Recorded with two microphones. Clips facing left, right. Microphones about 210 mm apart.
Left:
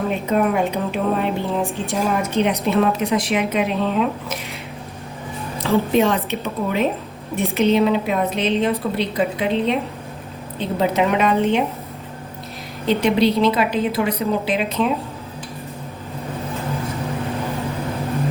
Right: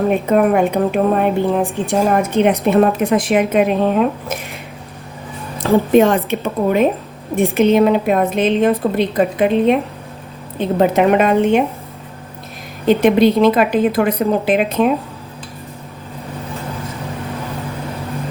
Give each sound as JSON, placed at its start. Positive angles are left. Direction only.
{"t": 0.1, "sound": "a woman's voice", "side_deg": -50}
{"t": 5.5, "sound": "a woman's voice", "side_deg": -50}
{"t": 12.9, "sound": "a woman's voice", "side_deg": -50}